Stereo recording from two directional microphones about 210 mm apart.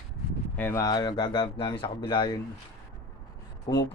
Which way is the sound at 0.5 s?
10° left (ahead or behind).